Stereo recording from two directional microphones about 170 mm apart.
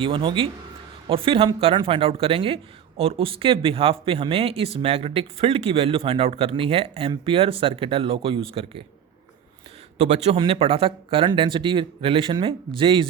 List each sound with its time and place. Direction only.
0.0 s speech: 30° right (ahead or behind)
10.0 s speech: 35° right (ahead or behind)